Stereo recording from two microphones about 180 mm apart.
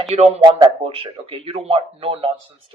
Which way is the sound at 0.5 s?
30° right (ahead or behind).